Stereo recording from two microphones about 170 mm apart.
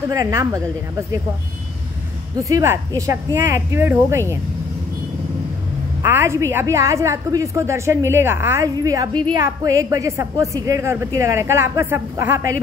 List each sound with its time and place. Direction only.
0.1 s a woman's voice: 20° right (ahead or behind)
2.4 s a woman's voice: 15° right (ahead or behind)
6.0 s a woman's voice: 15° right (ahead or behind)